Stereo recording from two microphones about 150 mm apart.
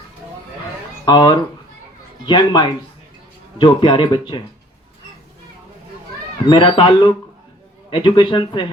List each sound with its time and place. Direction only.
1.0 s speech: 30° left (ahead or behind)
6.5 s speech: 35° left (ahead or behind)